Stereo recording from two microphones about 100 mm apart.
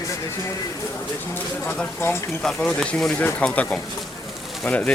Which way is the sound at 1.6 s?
25° left (ahead or behind).